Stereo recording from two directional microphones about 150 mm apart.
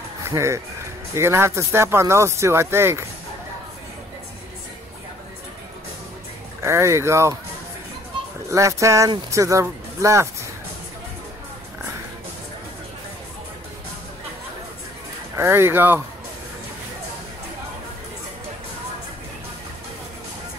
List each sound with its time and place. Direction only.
0.2 s speech: 20° right (ahead or behind)
6.6 s speech: 20° right (ahead or behind)
8.5 s speech: 20° right (ahead or behind)
15.3 s speech: 15° right (ahead or behind)